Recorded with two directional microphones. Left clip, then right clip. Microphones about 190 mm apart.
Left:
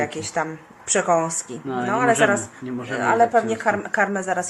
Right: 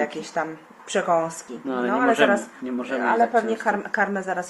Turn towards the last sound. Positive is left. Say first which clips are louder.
# left 2 dB
turn(degrees=15)  # may be behind; listen again after turning